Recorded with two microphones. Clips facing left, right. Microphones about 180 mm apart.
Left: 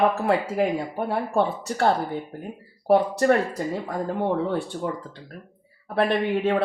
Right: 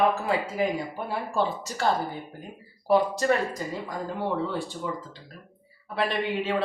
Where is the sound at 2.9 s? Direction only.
65° left (ahead or behind).